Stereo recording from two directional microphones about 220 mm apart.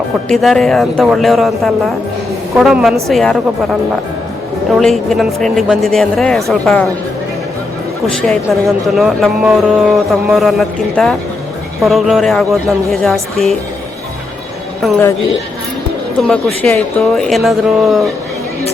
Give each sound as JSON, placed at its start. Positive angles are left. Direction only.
{"t": 0.3, "sound": "speech", "side_deg": 0}
{"t": 4.7, "sound": "speech", "side_deg": 0}
{"t": 8.0, "sound": "speech", "side_deg": 0}
{"t": 14.8, "sound": "a woman's voice", "side_deg": 0}
{"t": 16.2, "sound": "speech", "side_deg": 5}